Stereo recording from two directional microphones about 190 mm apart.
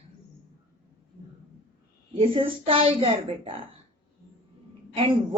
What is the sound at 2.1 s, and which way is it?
A woman's voice, 30° right (ahead or behind).